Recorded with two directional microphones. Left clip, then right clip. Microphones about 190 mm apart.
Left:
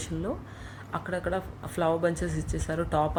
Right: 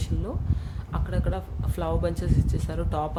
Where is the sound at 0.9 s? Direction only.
5° right (ahead or behind).